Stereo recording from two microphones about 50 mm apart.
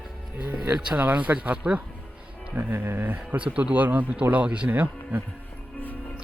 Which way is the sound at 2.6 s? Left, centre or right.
Right.